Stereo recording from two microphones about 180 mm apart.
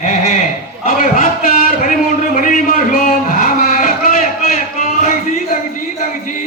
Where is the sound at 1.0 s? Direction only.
50° left (ahead or behind).